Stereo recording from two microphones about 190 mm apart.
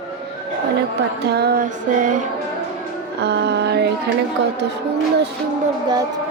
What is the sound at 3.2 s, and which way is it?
Music, 60° right (ahead or behind).